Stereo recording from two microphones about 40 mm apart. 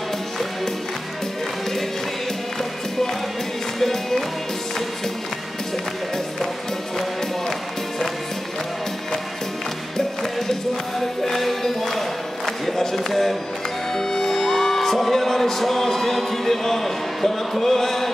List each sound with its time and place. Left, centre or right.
3.8 s music: centre
10.5 s music: centre
12.4 s a sound: centre
13.9 s music: centre